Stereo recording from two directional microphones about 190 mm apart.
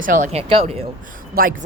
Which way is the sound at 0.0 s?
40° right (ahead or behind).